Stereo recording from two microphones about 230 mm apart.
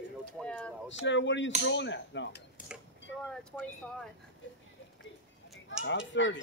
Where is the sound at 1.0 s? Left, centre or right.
Left.